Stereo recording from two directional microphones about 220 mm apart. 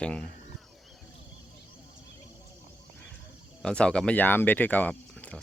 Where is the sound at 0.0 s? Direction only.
5° left (ahead or behind).